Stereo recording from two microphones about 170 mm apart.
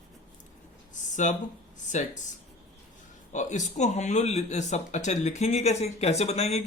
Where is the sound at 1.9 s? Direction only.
45° left (ahead or behind).